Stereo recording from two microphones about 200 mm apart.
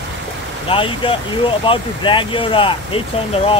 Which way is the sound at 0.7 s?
25° left (ahead or behind).